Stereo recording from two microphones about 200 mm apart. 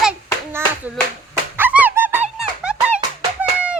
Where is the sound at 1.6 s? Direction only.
10° right (ahead or behind).